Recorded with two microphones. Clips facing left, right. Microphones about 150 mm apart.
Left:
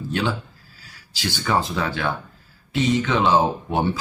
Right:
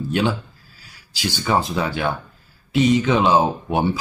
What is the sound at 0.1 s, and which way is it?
Speech, 15° right (ahead or behind).